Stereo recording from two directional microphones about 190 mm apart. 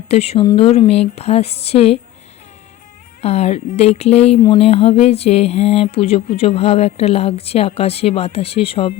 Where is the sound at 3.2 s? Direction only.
35° left (ahead or behind).